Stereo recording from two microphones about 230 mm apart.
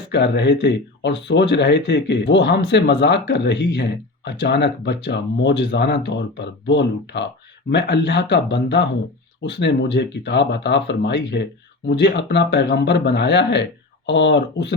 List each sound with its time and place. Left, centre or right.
0.1 s speech: left